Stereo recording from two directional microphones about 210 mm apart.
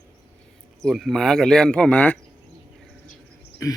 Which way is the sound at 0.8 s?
Centre (ahead or behind).